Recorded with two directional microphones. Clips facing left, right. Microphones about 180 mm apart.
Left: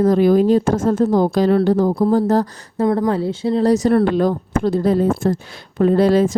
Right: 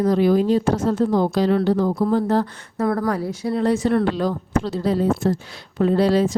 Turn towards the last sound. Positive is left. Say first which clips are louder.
# left 4 dB
turn(degrees=50)  # may be behind; listen again after turning